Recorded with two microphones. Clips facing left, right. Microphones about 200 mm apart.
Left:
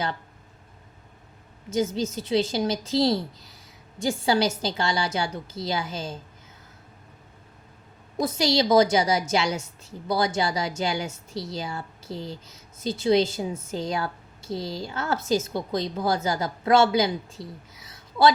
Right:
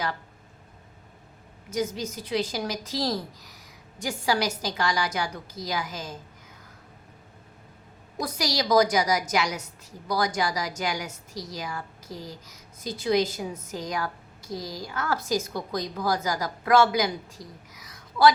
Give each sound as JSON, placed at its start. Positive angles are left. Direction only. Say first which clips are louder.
{"t": 1.7, "sound": "a woman's voice", "louder": "left 4 dB", "side_deg": 25}
{"t": 8.2, "sound": "a woman's voice", "louder": "left 6 dB", "side_deg": 25}